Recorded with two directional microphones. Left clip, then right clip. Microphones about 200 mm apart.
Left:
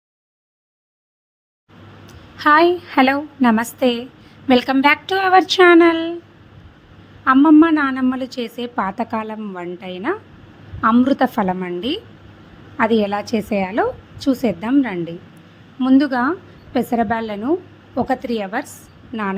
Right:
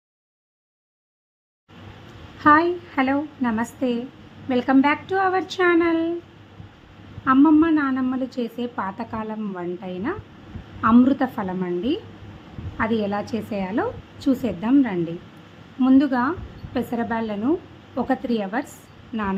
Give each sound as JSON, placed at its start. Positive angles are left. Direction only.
{"t": 2.4, "sound": "a woman's voice", "side_deg": 45}
{"t": 7.3, "sound": "a woman's voice", "side_deg": 35}